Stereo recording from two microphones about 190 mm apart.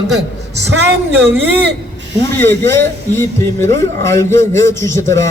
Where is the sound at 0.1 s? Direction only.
65° right (ahead or behind).